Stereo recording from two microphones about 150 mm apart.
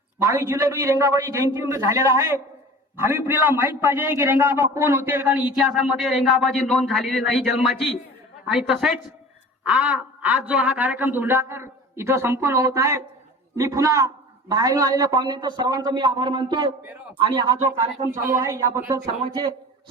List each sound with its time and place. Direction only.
0.3 s a man's voice: 20° right (ahead or behind)
19.2 s a man's voice: 30° right (ahead or behind)